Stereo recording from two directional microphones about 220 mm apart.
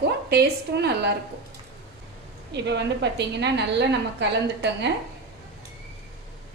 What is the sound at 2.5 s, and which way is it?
A woman's voice, 50° right (ahead or behind).